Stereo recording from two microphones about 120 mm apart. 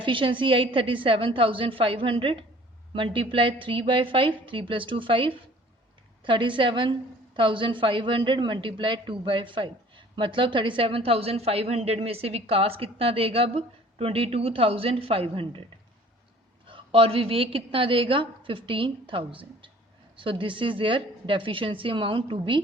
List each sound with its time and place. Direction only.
0.0 s a woman's voice: 45° right (ahead or behind)
16.6 s a woman's voice: 50° right (ahead or behind)